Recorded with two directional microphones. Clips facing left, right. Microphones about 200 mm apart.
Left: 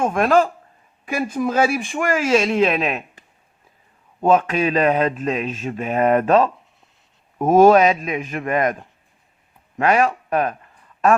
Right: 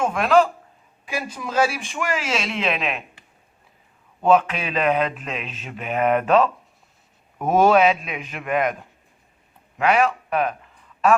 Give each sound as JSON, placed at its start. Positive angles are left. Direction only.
{"t": 0.0, "sound": "a man's voice", "side_deg": 50}
{"t": 9.7, "sound": "a man's voice", "side_deg": 45}